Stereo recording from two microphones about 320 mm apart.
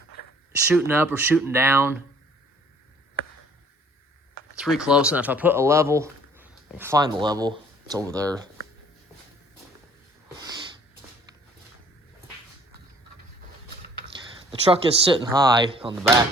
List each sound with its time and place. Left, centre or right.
0.5 s speech: centre
4.5 s speech: centre
10.3 s snort: centre
14.7 s speech: centre